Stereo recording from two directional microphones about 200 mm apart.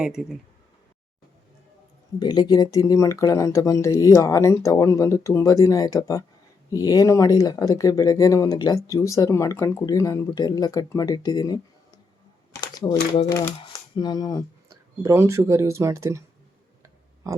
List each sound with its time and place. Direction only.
0.0 s speech: 5° right (ahead or behind)
2.1 s speech: 20° left (ahead or behind)
14.7 s speech: 15° right (ahead or behind)